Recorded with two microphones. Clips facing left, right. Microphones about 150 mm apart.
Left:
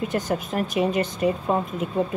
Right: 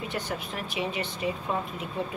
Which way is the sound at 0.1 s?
45° left (ahead or behind).